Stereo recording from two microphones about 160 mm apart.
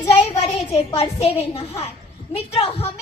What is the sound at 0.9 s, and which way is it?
A woman's voice, 40° left (ahead or behind).